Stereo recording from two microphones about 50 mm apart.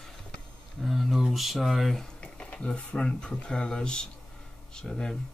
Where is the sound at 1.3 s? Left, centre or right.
Centre.